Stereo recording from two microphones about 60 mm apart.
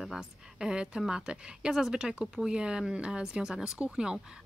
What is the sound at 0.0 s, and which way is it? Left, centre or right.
Speech, centre.